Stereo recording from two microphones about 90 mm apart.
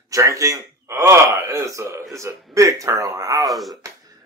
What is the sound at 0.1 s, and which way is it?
A man's voice, 40° right (ahead or behind).